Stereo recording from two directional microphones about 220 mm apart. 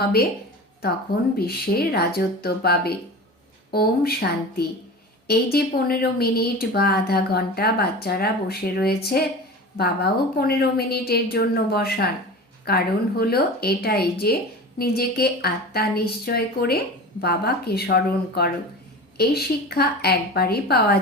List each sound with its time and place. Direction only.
0.0 s speech: 45° left (ahead or behind)
1.4 s speech: 45° left (ahead or behind)